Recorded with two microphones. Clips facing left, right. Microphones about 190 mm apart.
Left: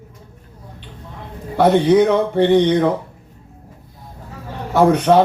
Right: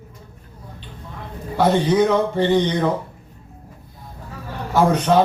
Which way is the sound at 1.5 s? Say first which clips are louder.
Left 4 dB; 65° left (ahead or behind).